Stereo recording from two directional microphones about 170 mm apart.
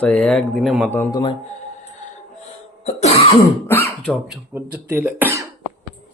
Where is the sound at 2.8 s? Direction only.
40° left (ahead or behind).